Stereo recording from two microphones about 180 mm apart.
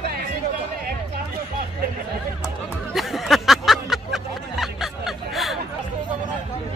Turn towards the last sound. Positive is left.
turn(degrees=0)  # may be behind; listen again after turning